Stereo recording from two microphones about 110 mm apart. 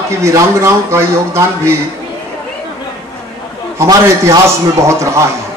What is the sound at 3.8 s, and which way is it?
A man's voice, 25° right (ahead or behind).